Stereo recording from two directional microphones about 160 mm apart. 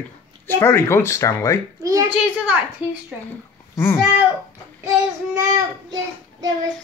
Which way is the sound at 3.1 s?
5° right (ahead or behind).